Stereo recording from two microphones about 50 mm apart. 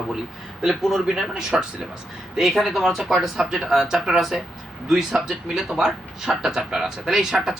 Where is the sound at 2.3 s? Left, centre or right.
Centre.